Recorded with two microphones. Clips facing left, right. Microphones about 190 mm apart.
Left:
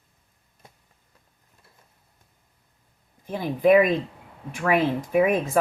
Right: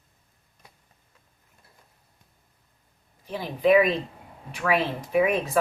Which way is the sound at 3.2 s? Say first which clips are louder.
Left 3 dB; 50° left (ahead or behind).